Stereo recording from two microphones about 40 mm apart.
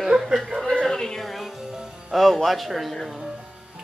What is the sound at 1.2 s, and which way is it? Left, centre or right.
A man's voice, centre.